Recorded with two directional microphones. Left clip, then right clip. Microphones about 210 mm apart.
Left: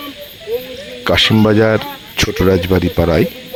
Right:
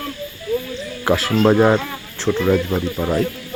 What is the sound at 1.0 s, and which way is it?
Speech, 25° left (ahead or behind).